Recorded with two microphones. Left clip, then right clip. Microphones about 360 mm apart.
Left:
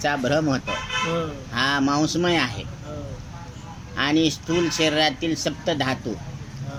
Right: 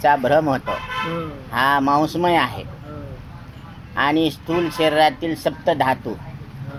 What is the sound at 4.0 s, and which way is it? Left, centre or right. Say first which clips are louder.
Speech: right 3 dB; centre.